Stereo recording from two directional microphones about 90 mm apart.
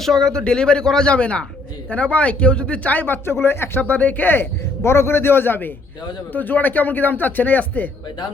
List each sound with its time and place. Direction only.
0.0 s a man's voice: 5° left (ahead or behind)